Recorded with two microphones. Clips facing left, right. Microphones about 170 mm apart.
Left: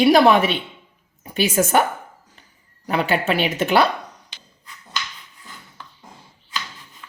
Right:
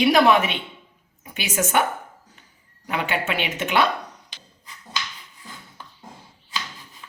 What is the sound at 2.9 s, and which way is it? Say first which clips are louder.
Speech: left 5 dB; 35° left (ahead or behind).